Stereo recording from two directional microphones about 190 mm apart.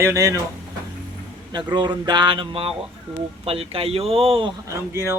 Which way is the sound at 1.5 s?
25° right (ahead or behind).